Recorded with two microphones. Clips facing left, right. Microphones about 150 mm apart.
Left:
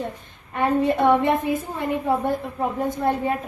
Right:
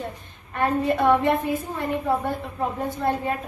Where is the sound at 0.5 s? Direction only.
15° left (ahead or behind).